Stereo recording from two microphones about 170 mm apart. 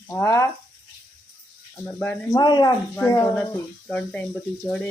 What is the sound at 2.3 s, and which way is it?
Speech, 25° left (ahead or behind).